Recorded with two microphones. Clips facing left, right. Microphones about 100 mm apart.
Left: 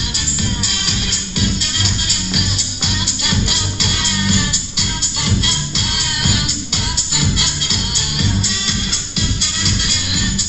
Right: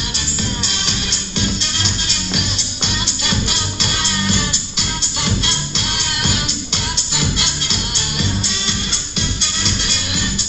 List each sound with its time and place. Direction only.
3.3 s music: 10° left (ahead or behind)